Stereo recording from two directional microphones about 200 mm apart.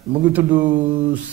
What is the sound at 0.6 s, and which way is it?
Speech, 25° right (ahead or behind).